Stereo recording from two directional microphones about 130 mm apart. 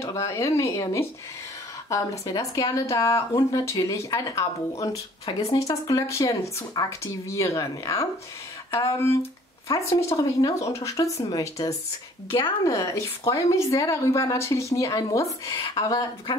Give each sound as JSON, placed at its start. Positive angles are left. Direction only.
{"t": 0.0, "sound": "speech", "side_deg": 25}
{"t": 9.7, "sound": "speech", "side_deg": 25}
{"t": 12.3, "sound": "speech", "side_deg": 40}
{"t": 12.6, "sound": "speech", "side_deg": 25}